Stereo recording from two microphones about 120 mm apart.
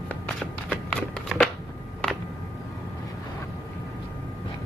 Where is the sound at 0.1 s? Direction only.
15° left (ahead or behind).